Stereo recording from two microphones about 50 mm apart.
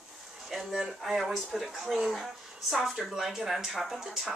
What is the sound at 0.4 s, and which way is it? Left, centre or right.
Speech, centre.